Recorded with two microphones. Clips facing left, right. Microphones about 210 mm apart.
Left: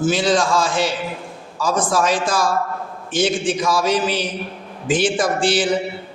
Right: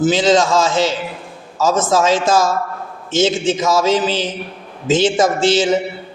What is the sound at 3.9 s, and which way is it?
Speech, 90° right.